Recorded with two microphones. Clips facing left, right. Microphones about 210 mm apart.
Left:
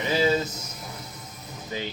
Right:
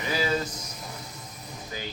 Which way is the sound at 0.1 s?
25° left (ahead or behind).